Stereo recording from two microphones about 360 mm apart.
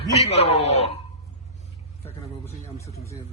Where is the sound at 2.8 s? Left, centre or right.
Centre.